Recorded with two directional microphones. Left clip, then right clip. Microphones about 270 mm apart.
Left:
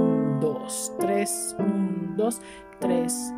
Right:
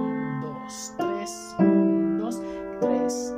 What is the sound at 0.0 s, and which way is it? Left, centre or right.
Music, left.